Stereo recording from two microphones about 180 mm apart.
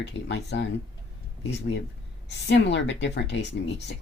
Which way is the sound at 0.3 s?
75° left (ahead or behind).